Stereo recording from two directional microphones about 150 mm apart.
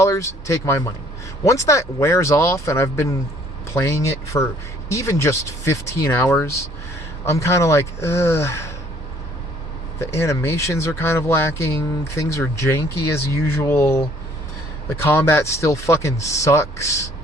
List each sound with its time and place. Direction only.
0.0 s speech: 20° left (ahead or behind)
10.0 s speech: 20° left (ahead or behind)